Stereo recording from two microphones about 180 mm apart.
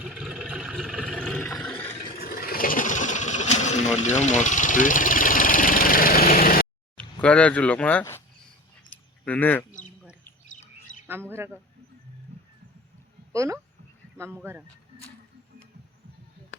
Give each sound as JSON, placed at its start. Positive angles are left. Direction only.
{"t": 0.0, "sound": "vehicle", "side_deg": -5}
{"t": 2.1, "sound": "vehicle", "side_deg": 55}
{"t": 6.9, "sound": "speech", "side_deg": 5}
{"t": 9.2, "sound": "bird", "side_deg": 10}
{"t": 10.9, "sound": "bird", "side_deg": 90}
{"t": 11.3, "sound": "speech", "side_deg": -10}
{"t": 13.3, "sound": "speech", "side_deg": -15}